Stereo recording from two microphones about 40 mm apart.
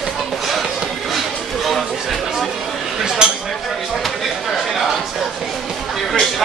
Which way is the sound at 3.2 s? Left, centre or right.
Right.